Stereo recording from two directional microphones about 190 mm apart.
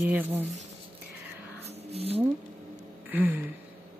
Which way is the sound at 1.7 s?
30° right (ahead or behind).